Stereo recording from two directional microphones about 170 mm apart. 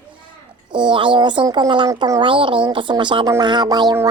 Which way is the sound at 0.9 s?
30° right (ahead or behind).